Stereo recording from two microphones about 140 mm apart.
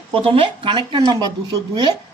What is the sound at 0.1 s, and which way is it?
Speech, 40° right (ahead or behind).